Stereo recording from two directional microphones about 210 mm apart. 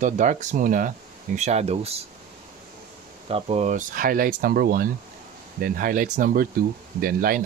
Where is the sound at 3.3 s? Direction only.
30° right (ahead or behind).